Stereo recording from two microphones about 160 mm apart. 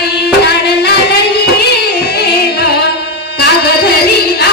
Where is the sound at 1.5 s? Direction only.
90° left.